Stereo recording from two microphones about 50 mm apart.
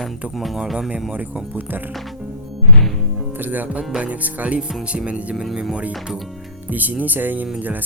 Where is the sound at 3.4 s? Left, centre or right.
Right.